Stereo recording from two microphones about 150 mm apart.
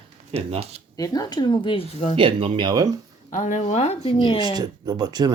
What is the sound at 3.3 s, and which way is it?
Speech, 55° left (ahead or behind).